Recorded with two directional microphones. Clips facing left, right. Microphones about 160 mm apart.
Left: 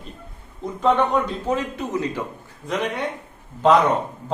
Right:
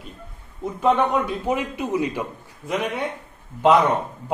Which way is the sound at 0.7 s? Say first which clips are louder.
Even; 10° right (ahead or behind).